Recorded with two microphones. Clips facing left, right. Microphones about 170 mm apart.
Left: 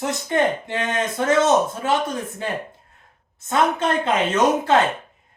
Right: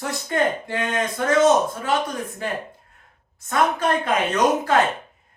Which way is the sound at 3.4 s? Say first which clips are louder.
Left 1 dB; 25° left (ahead or behind).